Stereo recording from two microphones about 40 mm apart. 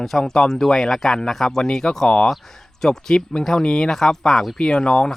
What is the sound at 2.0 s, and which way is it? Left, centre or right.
Speech, left.